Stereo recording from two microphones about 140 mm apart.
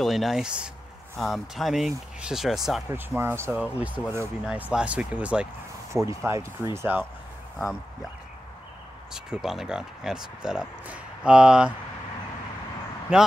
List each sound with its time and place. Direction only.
0.0 s speech: centre (ahead or behind)
3.2 s speech: 15° right (ahead or behind)
5.9 s speech: 20° right (ahead or behind)
7.5 s speech: centre (ahead or behind)
9.1 s speech: 5° right (ahead or behind)
13.1 s speech: 5° right (ahead or behind)